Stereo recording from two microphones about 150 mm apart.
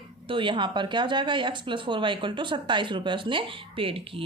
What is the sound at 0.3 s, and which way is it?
Speech, 35° right (ahead or behind).